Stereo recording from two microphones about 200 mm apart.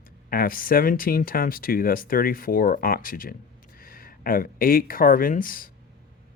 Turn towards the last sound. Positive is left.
turn(degrees=45)  # may be behind; listen again after turning